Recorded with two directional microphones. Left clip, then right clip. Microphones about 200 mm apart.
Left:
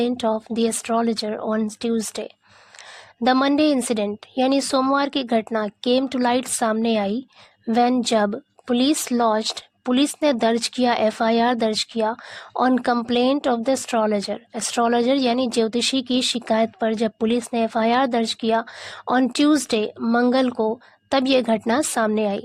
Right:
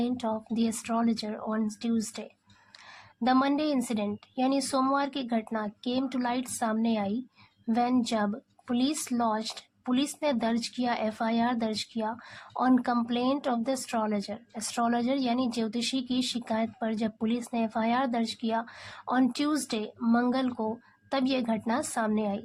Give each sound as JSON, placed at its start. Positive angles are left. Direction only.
{"t": 0.0, "sound": "speech", "side_deg": 45}